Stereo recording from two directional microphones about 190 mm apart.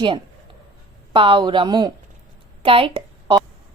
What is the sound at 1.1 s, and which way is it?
A woman's voice, 25° right (ahead or behind).